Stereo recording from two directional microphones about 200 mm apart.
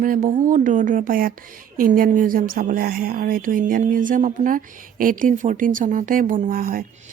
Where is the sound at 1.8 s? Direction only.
40° right (ahead or behind).